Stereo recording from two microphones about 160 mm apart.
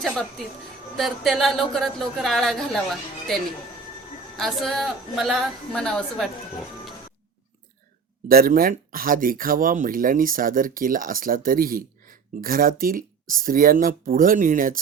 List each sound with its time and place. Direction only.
0.9 s a woman's voice: centre (ahead or behind)
4.4 s a woman's voice: centre (ahead or behind)
8.3 s speech: 65° right (ahead or behind)